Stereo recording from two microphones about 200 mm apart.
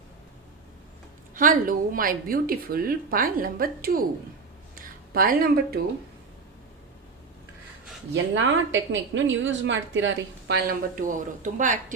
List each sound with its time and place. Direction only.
1.4 s a woman's voice: 45° right (ahead or behind)
4.7 s a sound: 45° right (ahead or behind)
8.1 s a woman's voice: 70° right (ahead or behind)
11.0 s speech: 40° right (ahead or behind)